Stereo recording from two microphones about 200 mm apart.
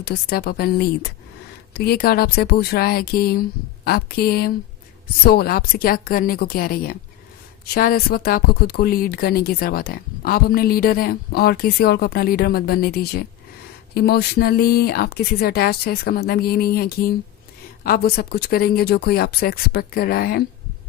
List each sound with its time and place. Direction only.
0.0 s speech: 50° left (ahead or behind)